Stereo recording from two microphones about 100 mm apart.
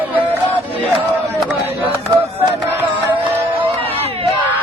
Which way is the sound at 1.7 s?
25° right (ahead or behind).